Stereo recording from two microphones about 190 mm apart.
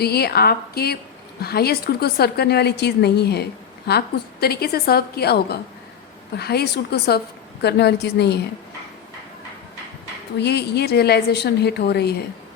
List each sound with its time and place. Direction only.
0.0 s a woman's voice: 55° left (ahead or behind)
10.3 s a woman's voice: 60° left (ahead or behind)